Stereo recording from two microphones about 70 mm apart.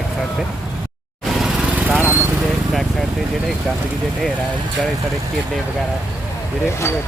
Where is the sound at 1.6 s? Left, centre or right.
Right.